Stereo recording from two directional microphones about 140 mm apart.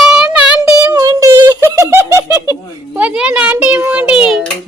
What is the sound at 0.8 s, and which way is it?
Speech, 25° right (ahead or behind).